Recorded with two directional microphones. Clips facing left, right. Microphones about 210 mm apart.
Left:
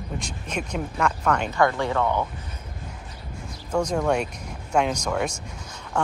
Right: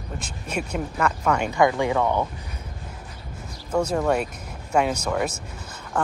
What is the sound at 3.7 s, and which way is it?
Speech, 5° right (ahead or behind).